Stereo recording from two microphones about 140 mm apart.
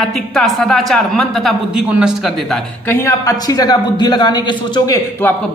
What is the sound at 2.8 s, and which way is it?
A woman's voice, 20° left (ahead or behind).